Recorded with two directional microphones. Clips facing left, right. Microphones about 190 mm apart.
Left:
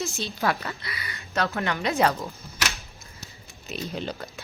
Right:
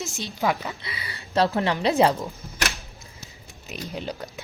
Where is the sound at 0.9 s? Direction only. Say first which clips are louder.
Right 1 dB; 25° right (ahead or behind).